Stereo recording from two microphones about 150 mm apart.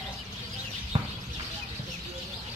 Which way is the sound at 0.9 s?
35° right (ahead or behind).